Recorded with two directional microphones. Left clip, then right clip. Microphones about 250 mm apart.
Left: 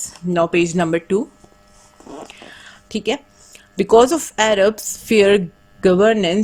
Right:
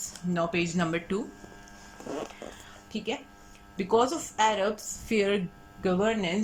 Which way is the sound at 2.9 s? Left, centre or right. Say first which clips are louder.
Left 12 dB; left.